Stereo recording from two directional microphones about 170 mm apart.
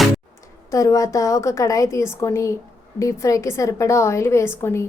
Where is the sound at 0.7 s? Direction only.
20° left (ahead or behind).